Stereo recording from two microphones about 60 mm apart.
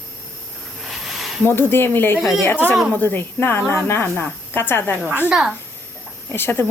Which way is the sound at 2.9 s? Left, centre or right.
Left.